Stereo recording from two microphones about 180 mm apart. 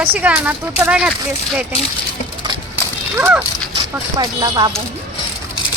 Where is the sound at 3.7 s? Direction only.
25° right (ahead or behind).